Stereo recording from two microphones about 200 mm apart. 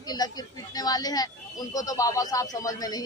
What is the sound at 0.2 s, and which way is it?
Speech, 20° left (ahead or behind).